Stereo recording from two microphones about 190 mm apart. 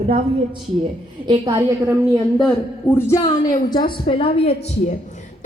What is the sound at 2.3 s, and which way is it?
Speech, 5° left (ahead or behind).